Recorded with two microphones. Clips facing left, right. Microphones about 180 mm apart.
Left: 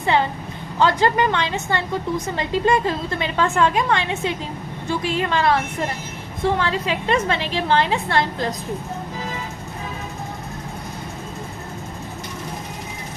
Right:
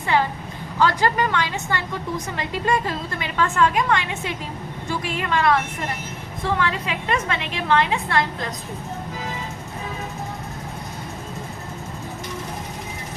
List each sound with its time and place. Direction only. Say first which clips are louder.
0.0 s a woman's voice: left 2 dB; 25° left (ahead or behind)
6.6 s a woman's voice: left 2 dB; 30° left (ahead or behind)